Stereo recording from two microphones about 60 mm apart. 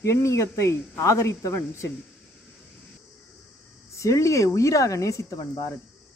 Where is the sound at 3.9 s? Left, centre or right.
Left.